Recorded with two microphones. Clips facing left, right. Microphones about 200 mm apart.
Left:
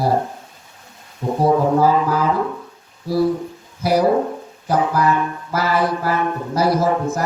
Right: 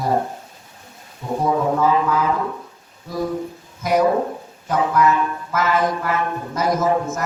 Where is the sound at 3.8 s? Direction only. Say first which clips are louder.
Left 1 dB; 35° left (ahead or behind).